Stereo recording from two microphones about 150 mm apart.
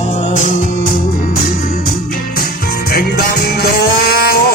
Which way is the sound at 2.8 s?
90° left.